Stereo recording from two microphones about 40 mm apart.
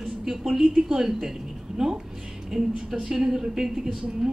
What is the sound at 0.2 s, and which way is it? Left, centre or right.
A woman's voice, centre.